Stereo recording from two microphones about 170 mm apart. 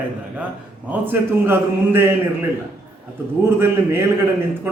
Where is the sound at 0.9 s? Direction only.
10° right (ahead or behind).